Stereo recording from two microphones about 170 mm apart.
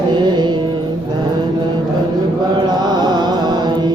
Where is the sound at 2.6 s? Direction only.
25° right (ahead or behind).